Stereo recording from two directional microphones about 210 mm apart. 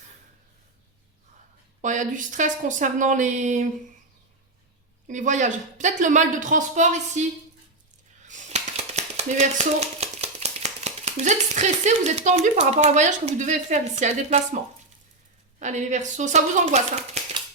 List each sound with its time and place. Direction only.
1.8 s speech: 35° right (ahead or behind)
5.0 s speech: 35° right (ahead or behind)
8.3 s speech: 30° right (ahead or behind)
15.5 s speech: 35° right (ahead or behind)